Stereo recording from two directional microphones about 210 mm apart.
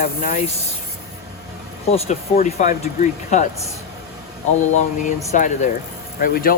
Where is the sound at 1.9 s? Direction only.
30° left (ahead or behind).